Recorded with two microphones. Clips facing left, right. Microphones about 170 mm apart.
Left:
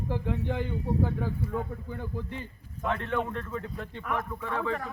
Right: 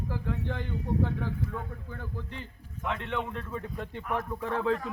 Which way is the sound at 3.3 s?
5° right (ahead or behind).